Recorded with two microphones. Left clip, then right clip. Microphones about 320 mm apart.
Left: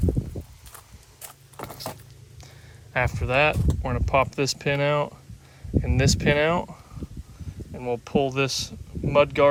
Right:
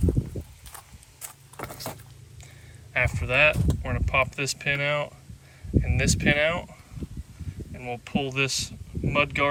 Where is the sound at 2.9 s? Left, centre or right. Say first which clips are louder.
Left 1 dB; centre.